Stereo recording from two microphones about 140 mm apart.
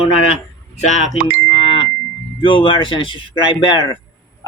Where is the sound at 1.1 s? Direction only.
90° right.